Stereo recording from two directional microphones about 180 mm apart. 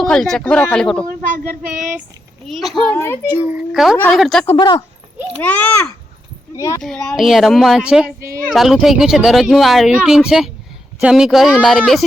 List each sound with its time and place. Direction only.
0.0 s speech: centre (ahead or behind)
1.0 s a sound: 50° right (ahead or behind)
1.7 s speech: 45° right (ahead or behind)
2.5 s speech: centre (ahead or behind)
3.5 s speech: 5° right (ahead or behind)
3.9 s a child's voice: 10° left (ahead or behind)
4.5 s speech: 25° left (ahead or behind)
5.4 s a child's voice: 10° left (ahead or behind)
6.8 s speech: 5° left (ahead or behind)